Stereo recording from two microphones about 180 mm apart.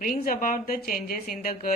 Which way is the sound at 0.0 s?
50° left (ahead or behind).